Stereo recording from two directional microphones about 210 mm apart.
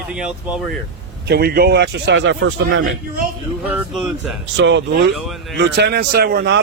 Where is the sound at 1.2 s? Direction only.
50° right (ahead or behind).